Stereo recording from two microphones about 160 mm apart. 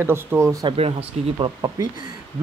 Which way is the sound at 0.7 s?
35° right (ahead or behind).